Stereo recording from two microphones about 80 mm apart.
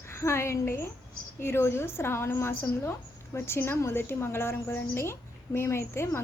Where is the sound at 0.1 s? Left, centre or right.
Left.